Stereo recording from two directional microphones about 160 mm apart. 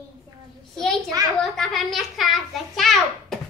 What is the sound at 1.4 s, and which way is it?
A child's voice, centre (ahead or behind).